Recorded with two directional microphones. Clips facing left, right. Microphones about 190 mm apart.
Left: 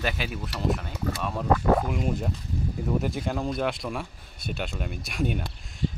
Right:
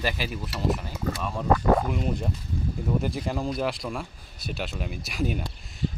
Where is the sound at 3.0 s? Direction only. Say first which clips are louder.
Even; centre (ahead or behind).